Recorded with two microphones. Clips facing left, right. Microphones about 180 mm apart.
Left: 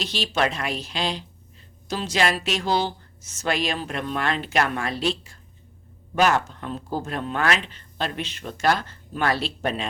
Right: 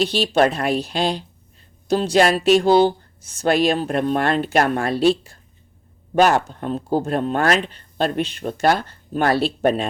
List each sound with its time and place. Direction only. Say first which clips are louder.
0.0 s speech: right 8 dB; 55° right (ahead or behind); by 1.2 s 40° right (ahead or behind)
2.0 s speech: right 7 dB; 50° right (ahead or behind)
4.8 s speech: right 9 dB; 35° right (ahead or behind)
6.1 s speech: right 5 dB; 40° right (ahead or behind)